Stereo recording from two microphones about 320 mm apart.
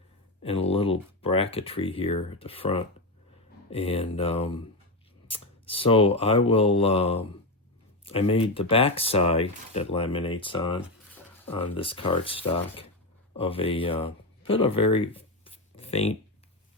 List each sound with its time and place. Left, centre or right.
0.4 s speech: centre